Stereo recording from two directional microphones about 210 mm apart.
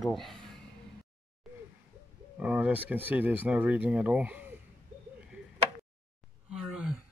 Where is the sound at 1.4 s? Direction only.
Centre (ahead or behind).